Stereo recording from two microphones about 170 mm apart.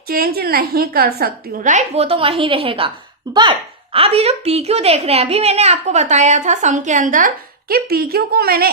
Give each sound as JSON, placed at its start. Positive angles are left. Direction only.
{"t": 0.1, "sound": "a woman's voice", "side_deg": -65}
{"t": 1.6, "sound": "a woman's voice", "side_deg": -45}